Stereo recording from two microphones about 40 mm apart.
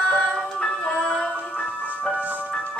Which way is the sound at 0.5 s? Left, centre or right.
Centre.